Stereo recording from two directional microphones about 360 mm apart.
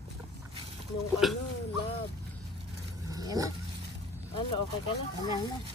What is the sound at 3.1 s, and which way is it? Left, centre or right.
Dog, centre.